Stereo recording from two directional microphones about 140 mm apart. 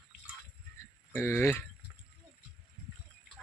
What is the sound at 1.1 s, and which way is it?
Speech, 15° left (ahead or behind).